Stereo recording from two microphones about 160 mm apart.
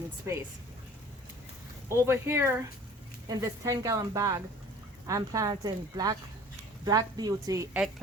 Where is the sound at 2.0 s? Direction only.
15° right (ahead or behind).